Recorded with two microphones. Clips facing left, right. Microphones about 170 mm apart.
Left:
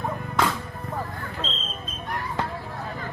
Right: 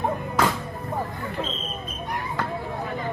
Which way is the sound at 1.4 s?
15° right (ahead or behind).